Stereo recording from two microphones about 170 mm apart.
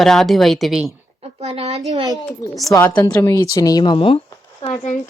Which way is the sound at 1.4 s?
35° right (ahead or behind).